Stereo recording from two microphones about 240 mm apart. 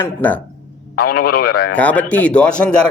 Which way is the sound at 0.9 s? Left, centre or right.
Left.